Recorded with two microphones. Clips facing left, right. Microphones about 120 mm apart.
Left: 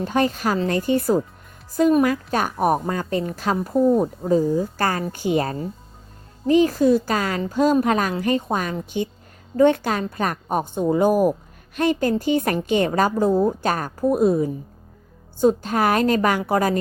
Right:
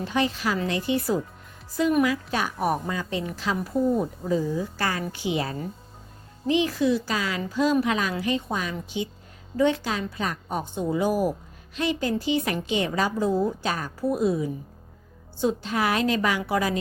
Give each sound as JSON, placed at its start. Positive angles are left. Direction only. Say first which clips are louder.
{"t": 0.0, "sound": "a woman's voice", "louder": "left 4 dB", "side_deg": 45}